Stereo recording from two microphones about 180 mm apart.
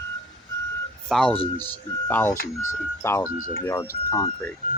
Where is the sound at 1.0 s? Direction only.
5° left (ahead or behind).